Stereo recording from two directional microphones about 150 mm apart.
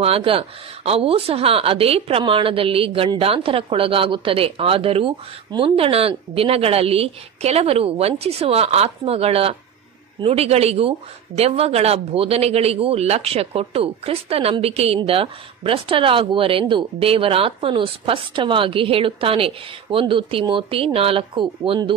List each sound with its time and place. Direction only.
0.0 s speech: 40° right (ahead or behind)